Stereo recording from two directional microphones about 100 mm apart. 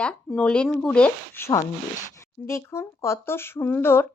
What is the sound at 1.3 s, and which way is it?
Speech, 25° left (ahead or behind).